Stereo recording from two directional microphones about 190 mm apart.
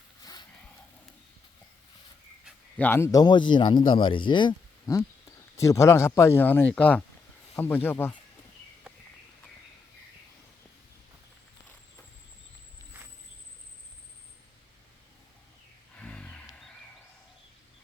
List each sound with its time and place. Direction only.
0.2 s a sound: 20° left (ahead or behind)
2.7 s a man's voice: 10° left (ahead or behind)
16.0 s roaring cats: 5° left (ahead or behind)